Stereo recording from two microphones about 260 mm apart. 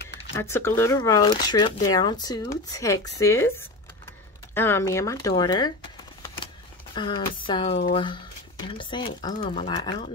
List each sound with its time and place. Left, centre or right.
0.4 s speech: centre
7.0 s speech: centre
9.7 s speech: centre